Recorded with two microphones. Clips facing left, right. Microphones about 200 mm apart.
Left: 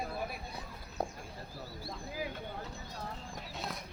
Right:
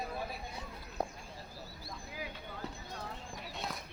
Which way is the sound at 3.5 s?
Centre (ahead or behind).